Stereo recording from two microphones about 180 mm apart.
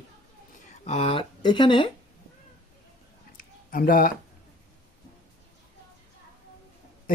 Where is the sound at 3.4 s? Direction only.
50° left (ahead or behind).